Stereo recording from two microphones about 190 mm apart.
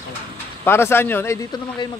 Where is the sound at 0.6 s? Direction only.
10° left (ahead or behind).